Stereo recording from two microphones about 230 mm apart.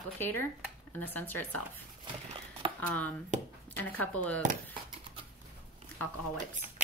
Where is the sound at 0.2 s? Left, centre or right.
Centre.